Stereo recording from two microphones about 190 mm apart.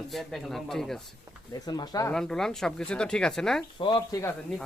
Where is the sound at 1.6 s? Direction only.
20° left (ahead or behind).